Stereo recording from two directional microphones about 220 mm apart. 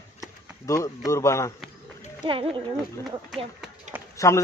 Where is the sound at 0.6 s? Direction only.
15° left (ahead or behind).